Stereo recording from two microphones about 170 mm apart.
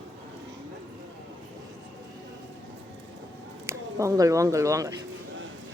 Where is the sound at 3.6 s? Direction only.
20° right (ahead or behind).